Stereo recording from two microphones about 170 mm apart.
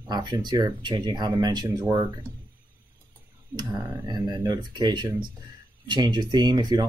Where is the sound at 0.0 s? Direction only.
25° right (ahead or behind).